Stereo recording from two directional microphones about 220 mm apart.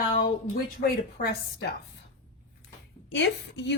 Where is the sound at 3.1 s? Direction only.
55° left (ahead or behind).